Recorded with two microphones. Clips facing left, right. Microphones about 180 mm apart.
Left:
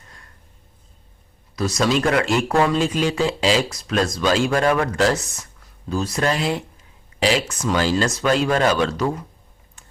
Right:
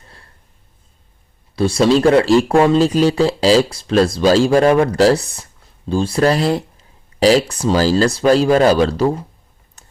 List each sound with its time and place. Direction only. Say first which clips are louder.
1.5 s speech: right 7 dB; 30° right (ahead or behind)
9.8 s typing: right 2 dB; 40° right (ahead or behind)